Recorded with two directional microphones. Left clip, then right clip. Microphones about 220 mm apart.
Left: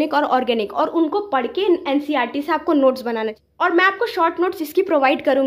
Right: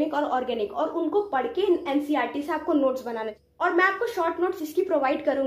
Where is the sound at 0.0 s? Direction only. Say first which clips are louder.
Left 7 dB; 45° left (ahead or behind).